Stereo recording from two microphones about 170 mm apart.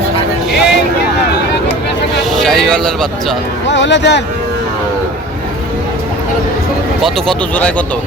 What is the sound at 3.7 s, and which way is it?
Speech, 90° left.